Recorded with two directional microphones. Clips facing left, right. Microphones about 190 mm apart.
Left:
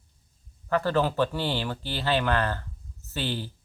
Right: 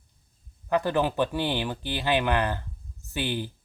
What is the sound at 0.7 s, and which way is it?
Speech, 15° right (ahead or behind).